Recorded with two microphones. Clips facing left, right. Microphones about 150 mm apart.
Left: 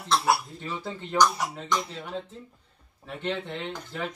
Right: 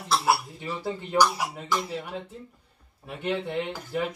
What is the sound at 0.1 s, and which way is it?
Speech, 5° right (ahead or behind).